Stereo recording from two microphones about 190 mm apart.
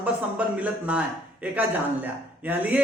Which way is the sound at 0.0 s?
5° right (ahead or behind).